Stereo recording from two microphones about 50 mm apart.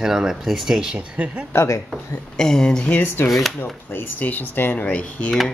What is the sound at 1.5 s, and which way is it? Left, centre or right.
Speech, left.